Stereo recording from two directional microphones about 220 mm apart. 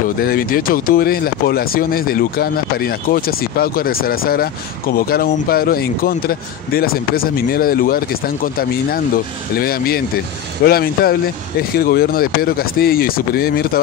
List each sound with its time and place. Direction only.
0.2 s speech: 40° left (ahead or behind)